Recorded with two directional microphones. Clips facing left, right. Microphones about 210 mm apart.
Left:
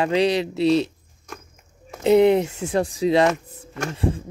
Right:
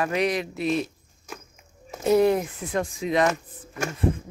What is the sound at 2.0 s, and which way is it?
Speech, 20° left (ahead or behind).